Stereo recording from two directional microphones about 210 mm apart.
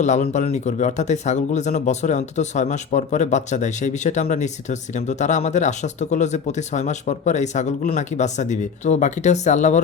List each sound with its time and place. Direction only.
0.0 s speech: 35° left (ahead or behind)